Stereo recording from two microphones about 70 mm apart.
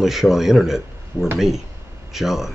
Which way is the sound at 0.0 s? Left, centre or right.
Centre.